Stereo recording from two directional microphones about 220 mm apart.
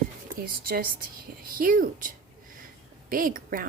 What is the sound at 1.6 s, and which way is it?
A woman's voice, 40° right (ahead or behind).